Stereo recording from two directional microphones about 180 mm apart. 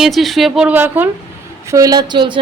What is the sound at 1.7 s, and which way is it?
Speech, 20° right (ahead or behind).